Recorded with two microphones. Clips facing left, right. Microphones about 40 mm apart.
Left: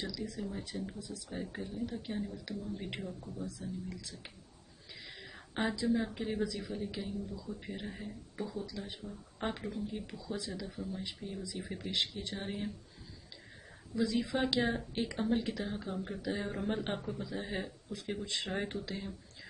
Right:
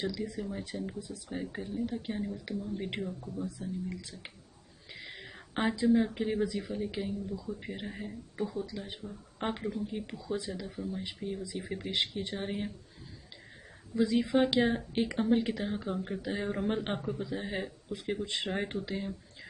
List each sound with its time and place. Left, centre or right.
0.1 s speech: right
1.4 s speech: centre
2.2 s speech: right
4.9 s a sound: right
5.9 s speech: centre
11.9 s speech: right
12.4 s speech: centre
13.9 s speech: right